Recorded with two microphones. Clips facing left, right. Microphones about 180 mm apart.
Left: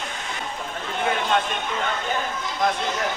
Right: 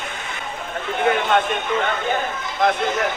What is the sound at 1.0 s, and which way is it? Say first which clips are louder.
Speech: right 4 dB; 55° right (ahead or behind).